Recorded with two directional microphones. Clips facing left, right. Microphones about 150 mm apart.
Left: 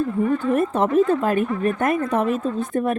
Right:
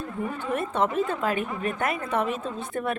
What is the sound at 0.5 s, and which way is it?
A woman's voice, 40° left (ahead or behind).